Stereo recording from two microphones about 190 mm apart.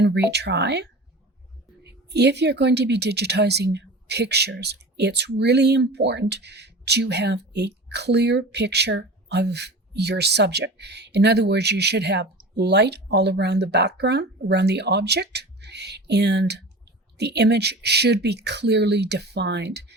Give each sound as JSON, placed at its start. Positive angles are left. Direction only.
{"t": 0.0, "sound": "speech", "side_deg": -60}